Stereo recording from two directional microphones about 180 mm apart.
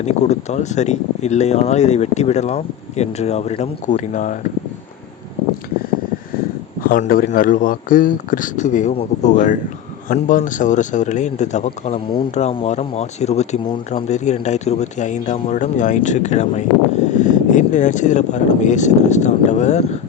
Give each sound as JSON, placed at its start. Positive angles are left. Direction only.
{"t": 0.0, "sound": "speech", "side_deg": 40}
{"t": 6.8, "sound": "speech", "side_deg": 50}